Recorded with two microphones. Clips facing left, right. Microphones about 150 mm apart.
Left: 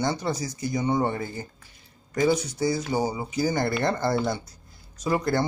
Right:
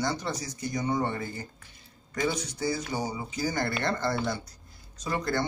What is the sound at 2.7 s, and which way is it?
Speech, 25° left (ahead or behind).